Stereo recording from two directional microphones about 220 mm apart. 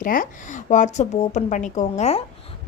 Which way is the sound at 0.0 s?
40° left (ahead or behind).